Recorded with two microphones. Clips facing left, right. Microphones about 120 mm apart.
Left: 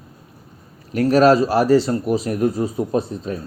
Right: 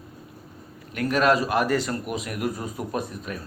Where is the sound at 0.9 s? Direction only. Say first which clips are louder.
Left 8 dB; 35° left (ahead or behind).